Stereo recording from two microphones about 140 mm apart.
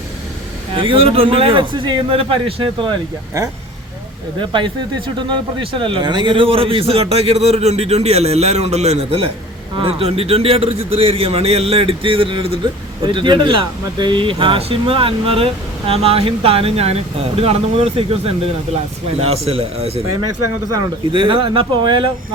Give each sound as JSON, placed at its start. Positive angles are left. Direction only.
{"t": 0.7, "sound": "speech", "side_deg": -40}
{"t": 4.4, "sound": "speech", "side_deg": -35}
{"t": 21.1, "sound": "speech", "side_deg": -35}